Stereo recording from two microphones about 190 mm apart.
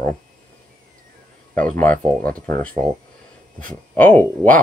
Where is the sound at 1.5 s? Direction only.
10° left (ahead or behind).